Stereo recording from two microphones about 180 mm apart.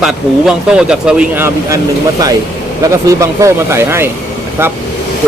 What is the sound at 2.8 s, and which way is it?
Speech, 20° right (ahead or behind).